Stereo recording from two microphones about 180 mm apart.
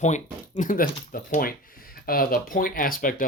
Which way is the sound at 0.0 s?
40° left (ahead or behind).